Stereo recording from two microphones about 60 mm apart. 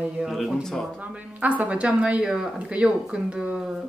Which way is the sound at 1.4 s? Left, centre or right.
Right.